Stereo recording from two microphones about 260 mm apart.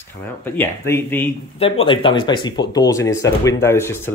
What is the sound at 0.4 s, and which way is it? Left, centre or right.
Speech, centre.